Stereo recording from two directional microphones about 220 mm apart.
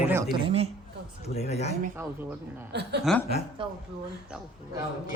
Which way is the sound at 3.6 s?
25° right (ahead or behind).